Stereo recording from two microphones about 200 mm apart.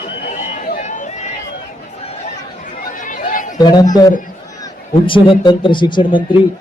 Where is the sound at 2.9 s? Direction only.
40° left (ahead or behind).